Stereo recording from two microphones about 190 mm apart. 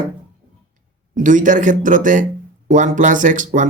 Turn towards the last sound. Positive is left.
turn(degrees=-40)  # may be behind; listen again after turning